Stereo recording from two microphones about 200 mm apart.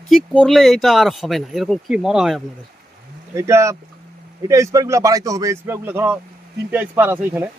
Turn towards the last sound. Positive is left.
turn(degrees=-10)  # may be behind; listen again after turning